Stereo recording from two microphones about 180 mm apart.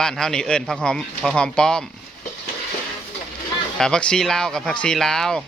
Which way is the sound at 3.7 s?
5° left (ahead or behind).